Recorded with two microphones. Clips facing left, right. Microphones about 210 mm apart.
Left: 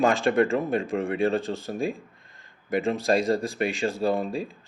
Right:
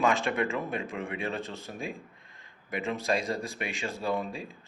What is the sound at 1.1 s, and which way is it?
Speech, 35° left (ahead or behind).